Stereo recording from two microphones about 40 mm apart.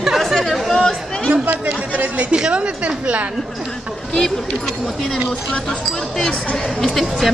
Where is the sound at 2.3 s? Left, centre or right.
Right.